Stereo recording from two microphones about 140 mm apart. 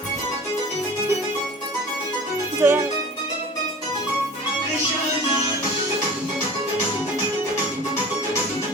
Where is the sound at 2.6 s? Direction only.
20° right (ahead or behind).